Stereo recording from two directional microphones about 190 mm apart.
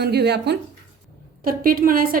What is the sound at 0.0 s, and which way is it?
Speech, 60° right (ahead or behind).